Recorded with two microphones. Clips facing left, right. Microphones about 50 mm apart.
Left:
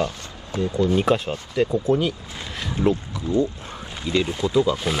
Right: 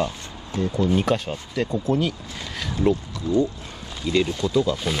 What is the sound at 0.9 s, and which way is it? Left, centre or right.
Speech, centre.